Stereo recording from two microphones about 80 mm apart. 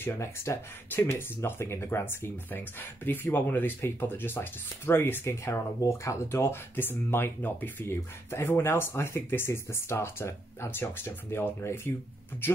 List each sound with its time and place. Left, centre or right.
0.0 s speech: left